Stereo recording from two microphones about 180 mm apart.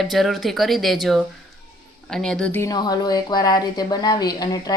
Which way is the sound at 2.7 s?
20° left (ahead or behind).